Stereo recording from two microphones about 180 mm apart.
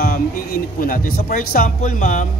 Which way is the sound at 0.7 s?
50° left (ahead or behind).